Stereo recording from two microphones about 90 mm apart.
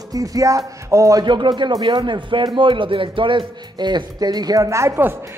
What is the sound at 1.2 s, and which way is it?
A man's voice, 60° right (ahead or behind).